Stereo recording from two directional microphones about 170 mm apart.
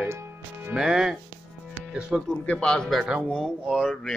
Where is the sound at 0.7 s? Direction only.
5° right (ahead or behind).